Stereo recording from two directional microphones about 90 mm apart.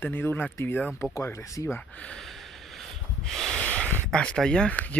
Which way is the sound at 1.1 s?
35° left (ahead or behind).